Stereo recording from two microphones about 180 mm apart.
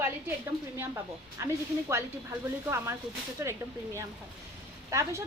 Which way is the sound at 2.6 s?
15° right (ahead or behind).